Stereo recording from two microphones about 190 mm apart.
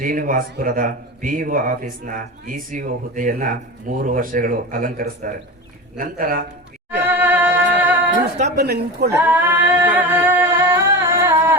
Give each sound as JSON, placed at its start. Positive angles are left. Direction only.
{"t": 0.0, "sound": "speech", "side_deg": -45}
{"t": 7.1, "sound": "music", "side_deg": -10}
{"t": 8.5, "sound": "a woman's voice", "side_deg": -60}
{"t": 9.1, "sound": "singing", "side_deg": -10}